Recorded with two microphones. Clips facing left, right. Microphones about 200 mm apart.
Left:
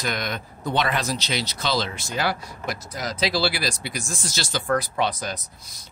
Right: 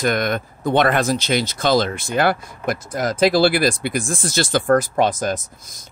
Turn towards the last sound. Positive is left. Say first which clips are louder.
# right 9 dB
turn(degrees=-50)  # may be behind; listen again after turning